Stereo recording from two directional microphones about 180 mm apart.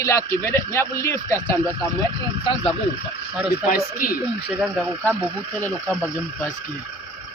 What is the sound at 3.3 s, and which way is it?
Speech, 5° right (ahead or behind).